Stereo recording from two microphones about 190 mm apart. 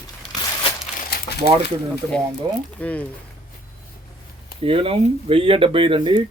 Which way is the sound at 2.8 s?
5° left (ahead or behind).